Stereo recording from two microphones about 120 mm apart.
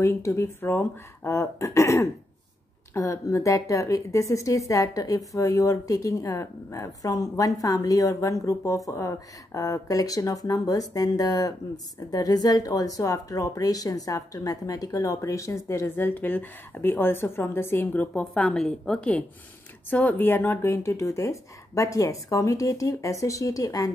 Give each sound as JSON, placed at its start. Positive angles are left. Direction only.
{"t": 0.0, "sound": "a woman's voice", "side_deg": 20}